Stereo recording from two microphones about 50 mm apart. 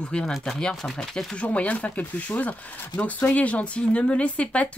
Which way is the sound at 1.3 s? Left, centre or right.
Left.